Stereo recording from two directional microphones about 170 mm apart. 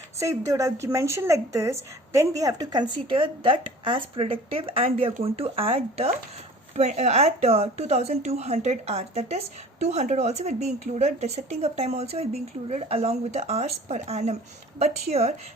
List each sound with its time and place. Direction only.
0.2 s a woman's voice: 15° right (ahead or behind); by 15.4 s 40° right (ahead or behind)